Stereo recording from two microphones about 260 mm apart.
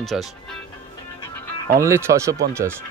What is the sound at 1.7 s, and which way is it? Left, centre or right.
Speech, centre.